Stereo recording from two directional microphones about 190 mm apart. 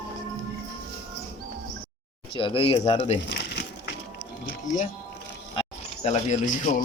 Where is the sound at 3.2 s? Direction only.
60° left (ahead or behind).